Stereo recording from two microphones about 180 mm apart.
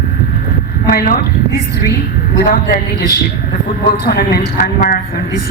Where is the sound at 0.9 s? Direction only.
55° left (ahead or behind).